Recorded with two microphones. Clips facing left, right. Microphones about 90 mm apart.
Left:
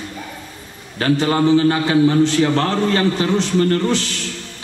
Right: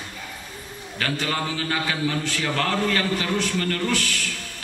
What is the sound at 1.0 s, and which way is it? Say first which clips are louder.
A man's voice: left 10 dB; 30° left (ahead or behind).